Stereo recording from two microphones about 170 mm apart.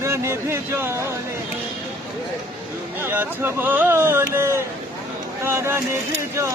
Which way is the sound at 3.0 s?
10° right (ahead or behind).